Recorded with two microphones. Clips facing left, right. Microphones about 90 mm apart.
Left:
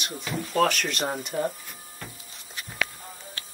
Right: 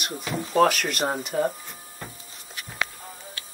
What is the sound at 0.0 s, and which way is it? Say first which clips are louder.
Speech: right 2 dB; centre (ahead or behind).